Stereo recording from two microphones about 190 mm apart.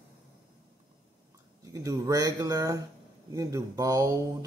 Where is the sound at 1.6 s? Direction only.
15° right (ahead or behind).